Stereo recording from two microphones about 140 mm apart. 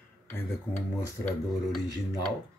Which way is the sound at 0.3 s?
15° left (ahead or behind).